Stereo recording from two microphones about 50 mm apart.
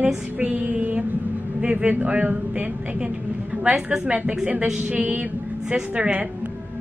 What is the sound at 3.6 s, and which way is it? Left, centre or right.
A woman's voice, right.